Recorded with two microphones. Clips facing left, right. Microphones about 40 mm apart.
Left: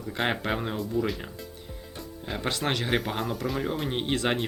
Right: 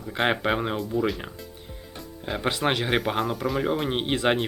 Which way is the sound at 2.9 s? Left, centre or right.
Centre.